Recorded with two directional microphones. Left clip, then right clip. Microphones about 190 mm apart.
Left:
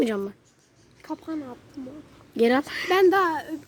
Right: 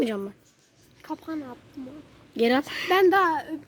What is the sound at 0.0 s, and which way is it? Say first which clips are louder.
Speech: left 2 dB; centre (ahead or behind).